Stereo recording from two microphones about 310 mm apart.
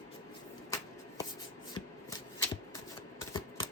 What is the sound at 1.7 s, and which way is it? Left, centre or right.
Shuffling cards, centre.